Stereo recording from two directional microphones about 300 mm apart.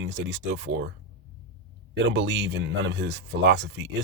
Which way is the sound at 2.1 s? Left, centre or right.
Right.